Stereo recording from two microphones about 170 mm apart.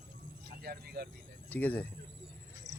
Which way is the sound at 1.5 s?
10° left (ahead or behind).